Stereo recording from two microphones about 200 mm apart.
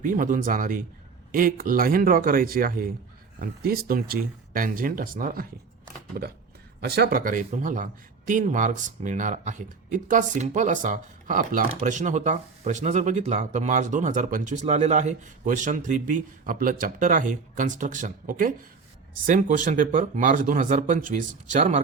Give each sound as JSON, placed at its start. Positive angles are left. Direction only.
{"t": 0.0, "sound": "speech", "side_deg": -40}